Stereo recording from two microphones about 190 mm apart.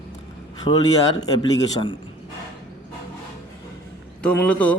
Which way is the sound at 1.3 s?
20° left (ahead or behind).